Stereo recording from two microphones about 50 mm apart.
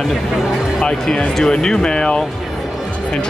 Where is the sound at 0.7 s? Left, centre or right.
Centre.